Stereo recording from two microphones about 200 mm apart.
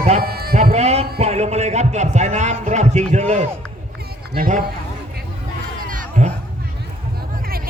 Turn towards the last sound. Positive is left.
turn(degrees=-40)  # may be behind; listen again after turning